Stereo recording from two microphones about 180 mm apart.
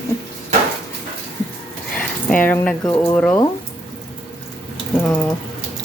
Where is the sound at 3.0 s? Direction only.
10° left (ahead or behind).